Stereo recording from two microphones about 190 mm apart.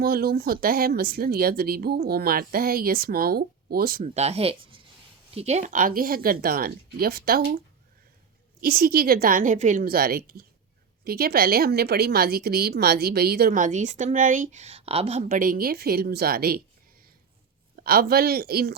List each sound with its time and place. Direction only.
0.0 s a woman's voice: 55° right (ahead or behind)
4.1 s a woman's voice: 35° right (ahead or behind); by 7.6 s 55° right (ahead or behind)
8.6 s a woman's voice: 55° right (ahead or behind)
17.8 s speech: 55° right (ahead or behind)